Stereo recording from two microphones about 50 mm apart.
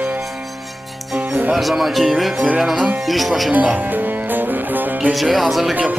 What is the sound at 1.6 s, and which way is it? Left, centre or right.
Speech, centre.